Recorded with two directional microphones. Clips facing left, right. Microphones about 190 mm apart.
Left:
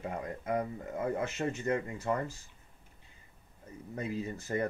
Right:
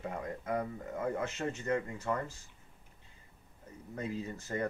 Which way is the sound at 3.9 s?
10° left (ahead or behind).